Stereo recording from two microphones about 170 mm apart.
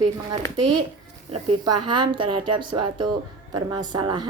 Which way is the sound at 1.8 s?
25° right (ahead or behind).